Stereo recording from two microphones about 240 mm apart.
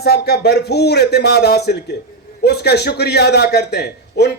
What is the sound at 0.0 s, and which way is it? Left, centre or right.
Speech, left.